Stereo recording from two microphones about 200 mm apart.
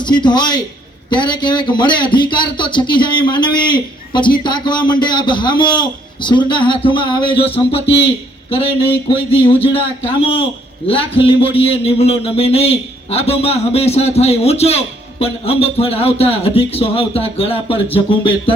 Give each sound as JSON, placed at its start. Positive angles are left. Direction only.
{"t": 0.0, "sound": "a man's voice", "side_deg": 20}
{"t": 10.8, "sound": "a man's voice", "side_deg": 25}